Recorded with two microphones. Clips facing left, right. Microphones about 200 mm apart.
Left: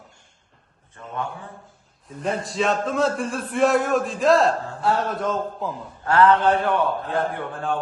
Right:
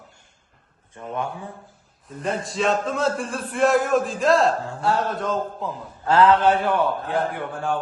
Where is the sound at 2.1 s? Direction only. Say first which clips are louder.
Left 1 dB; centre (ahead or behind).